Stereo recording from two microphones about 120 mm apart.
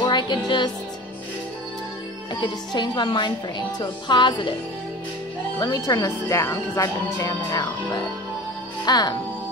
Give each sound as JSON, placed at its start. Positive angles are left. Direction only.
{"t": 0.0, "sound": "music", "side_deg": 40}
{"t": 2.4, "sound": "a woman's voice", "side_deg": 35}
{"t": 5.6, "sound": "a woman's voice", "side_deg": 30}